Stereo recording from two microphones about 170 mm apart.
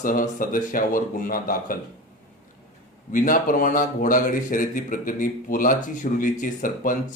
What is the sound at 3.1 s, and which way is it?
A man's voice, 50° left (ahead or behind).